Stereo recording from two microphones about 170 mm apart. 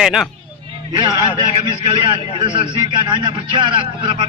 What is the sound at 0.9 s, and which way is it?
A man's voice, 25° right (ahead or behind).